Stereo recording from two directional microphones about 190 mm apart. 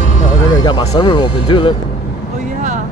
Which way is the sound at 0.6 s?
20° left (ahead or behind).